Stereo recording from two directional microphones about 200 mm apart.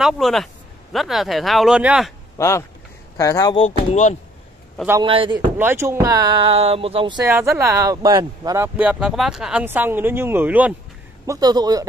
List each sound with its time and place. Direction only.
0.0 s speech: centre (ahead or behind)
2.3 s speech: 15° left (ahead or behind)
5.0 s speech: 25° right (ahead or behind)
5.6 s speech: 10° right (ahead or behind)
7.2 s speech: 15° right (ahead or behind)
11.2 s speech: 20° right (ahead or behind)